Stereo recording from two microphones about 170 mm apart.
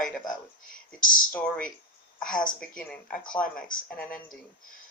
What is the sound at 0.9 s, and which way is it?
Speech, 55° left (ahead or behind).